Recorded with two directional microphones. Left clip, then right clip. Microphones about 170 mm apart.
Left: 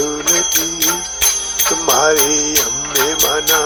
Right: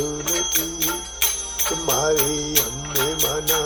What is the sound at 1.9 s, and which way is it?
Music, 15° left (ahead or behind).